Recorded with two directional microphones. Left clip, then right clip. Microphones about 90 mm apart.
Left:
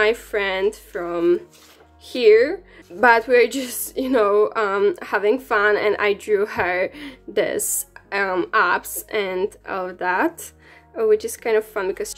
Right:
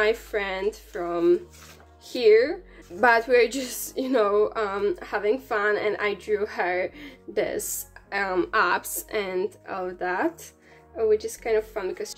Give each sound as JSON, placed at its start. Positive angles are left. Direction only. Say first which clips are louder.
{"t": 0.0, "sound": "a woman's voice", "louder": "left 5 dB", "side_deg": 35}
{"t": 3.0, "sound": "a woman's voice", "louder": "left 4 dB", "side_deg": 20}
{"t": 8.1, "sound": "a woman's voice", "louder": "left 4 dB", "side_deg": 35}
{"t": 11.0, "sound": "a woman's voice", "louder": "left 5 dB", "side_deg": 65}